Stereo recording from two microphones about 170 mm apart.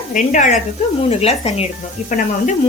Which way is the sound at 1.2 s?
35° left (ahead or behind).